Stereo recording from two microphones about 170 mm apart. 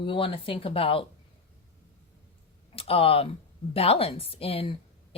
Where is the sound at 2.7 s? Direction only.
35° left (ahead or behind).